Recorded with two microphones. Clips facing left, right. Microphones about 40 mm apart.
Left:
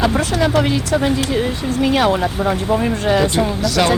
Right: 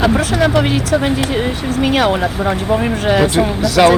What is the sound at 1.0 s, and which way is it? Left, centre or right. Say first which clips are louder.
Speech: right 1 dB; right.